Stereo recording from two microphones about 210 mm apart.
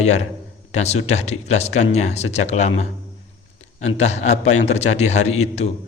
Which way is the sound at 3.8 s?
30° left (ahead or behind).